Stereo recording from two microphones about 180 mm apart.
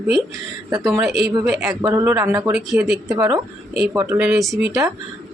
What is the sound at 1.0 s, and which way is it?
Speech, centre (ahead or behind).